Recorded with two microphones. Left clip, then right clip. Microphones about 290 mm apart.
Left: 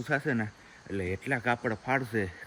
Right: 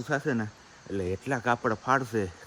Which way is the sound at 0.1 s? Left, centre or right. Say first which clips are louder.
Right 1 dB; centre.